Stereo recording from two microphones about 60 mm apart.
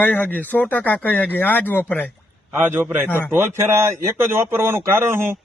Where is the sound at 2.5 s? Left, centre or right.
Right.